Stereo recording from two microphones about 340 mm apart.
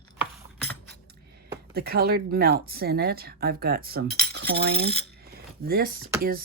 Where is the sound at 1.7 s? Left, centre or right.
Right.